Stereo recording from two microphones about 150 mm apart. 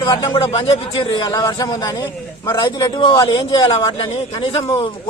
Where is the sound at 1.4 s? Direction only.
25° left (ahead or behind).